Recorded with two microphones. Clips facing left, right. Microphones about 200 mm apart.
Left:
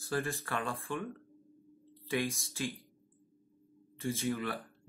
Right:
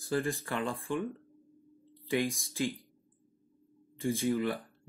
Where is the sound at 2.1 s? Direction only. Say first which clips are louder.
Right 3 dB; 15° right (ahead or behind).